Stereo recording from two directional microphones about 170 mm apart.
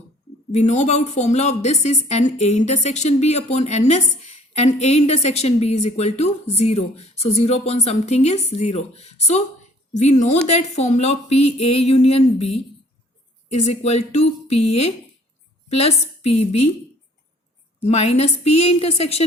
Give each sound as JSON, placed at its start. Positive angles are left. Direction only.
{"t": 0.5, "sound": "a woman's voice", "side_deg": 40}
{"t": 17.8, "sound": "a woman's voice", "side_deg": 40}